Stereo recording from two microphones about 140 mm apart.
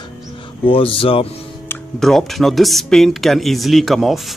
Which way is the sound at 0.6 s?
40° left (ahead or behind).